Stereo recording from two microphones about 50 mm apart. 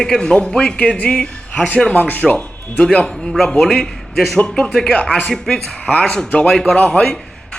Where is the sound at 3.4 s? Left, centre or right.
Centre.